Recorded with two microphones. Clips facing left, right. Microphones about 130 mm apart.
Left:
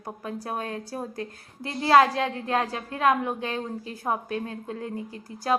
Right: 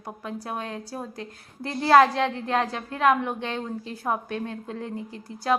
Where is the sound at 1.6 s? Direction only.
35° right (ahead or behind).